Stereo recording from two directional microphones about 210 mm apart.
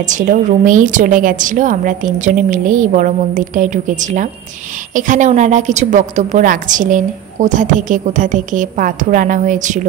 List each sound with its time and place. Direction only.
0.0 s a woman's voice: 35° right (ahead or behind)